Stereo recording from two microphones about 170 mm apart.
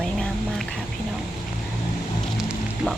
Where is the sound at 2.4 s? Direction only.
Centre (ahead or behind).